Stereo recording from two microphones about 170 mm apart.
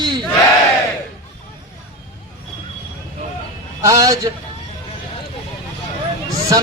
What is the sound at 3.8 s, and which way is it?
Speech, 20° right (ahead or behind).